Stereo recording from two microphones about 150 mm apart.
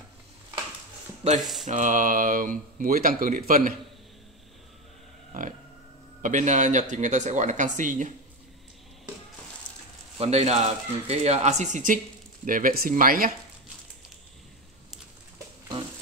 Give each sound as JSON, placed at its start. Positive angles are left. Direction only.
{"t": 1.4, "sound": "mantra", "side_deg": 0}
{"t": 1.7, "sound": "speech", "side_deg": -55}
{"t": 6.2, "sound": "speech", "side_deg": -55}
{"t": 10.1, "sound": "speech", "side_deg": -45}